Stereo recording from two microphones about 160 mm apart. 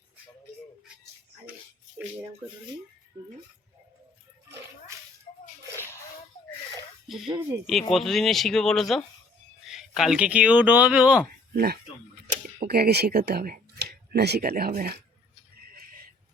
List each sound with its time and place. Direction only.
4.9 s a sound: 20° right (ahead or behind)
7.1 s speech: centre (ahead or behind)
11.5 s speech: 75° right (ahead or behind)